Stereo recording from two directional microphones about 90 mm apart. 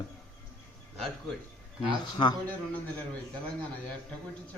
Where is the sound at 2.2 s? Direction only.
60° left (ahead or behind).